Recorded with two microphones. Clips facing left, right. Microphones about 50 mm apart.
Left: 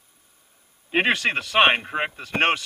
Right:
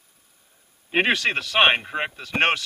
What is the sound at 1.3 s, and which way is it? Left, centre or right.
Speech, centre.